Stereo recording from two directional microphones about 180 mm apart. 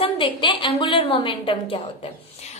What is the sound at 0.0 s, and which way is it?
A woman's voice, 30° left (ahead or behind).